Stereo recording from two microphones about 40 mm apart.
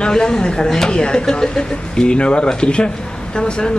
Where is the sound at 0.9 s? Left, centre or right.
Left.